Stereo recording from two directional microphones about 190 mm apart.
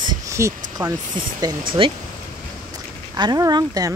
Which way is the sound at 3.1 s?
20° right (ahead or behind).